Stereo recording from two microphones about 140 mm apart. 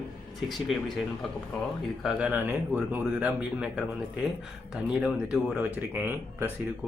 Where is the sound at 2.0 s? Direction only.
5° right (ahead or behind).